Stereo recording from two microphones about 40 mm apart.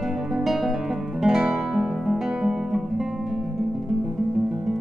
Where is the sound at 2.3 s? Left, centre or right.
Centre.